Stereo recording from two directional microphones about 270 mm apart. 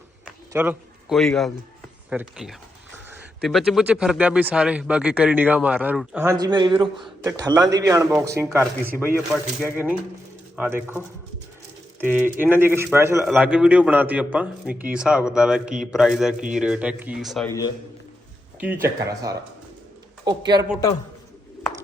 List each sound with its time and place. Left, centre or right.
0.5 s a man's voice: centre
18.6 s speech: centre